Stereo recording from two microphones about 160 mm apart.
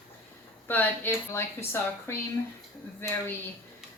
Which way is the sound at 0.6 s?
10° left (ahead or behind).